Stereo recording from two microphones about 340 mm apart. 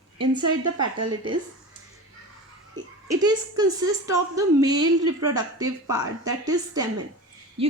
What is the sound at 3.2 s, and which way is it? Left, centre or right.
A woman's voice, centre.